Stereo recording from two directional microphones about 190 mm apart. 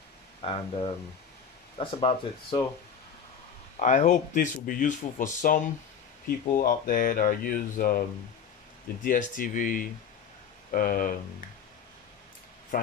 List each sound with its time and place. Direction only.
0.4 s speech: 30° left (ahead or behind)
3.7 s speech: 40° left (ahead or behind)
9.0 s speech: 45° left (ahead or behind)